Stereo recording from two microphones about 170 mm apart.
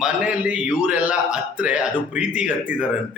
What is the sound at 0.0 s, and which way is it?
A man's voice, 5° right (ahead or behind).